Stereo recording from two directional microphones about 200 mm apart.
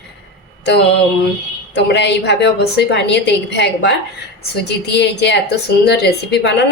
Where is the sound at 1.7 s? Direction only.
60° left (ahead or behind).